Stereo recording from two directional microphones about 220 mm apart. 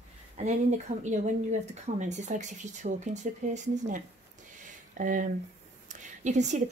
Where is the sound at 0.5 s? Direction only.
30° right (ahead or behind).